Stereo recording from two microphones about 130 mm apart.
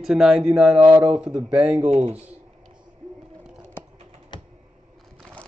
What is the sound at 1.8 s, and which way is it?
Speech, 60° right (ahead or behind).